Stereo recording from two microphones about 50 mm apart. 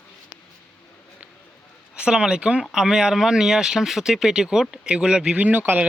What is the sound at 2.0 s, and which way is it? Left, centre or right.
Speech, centre.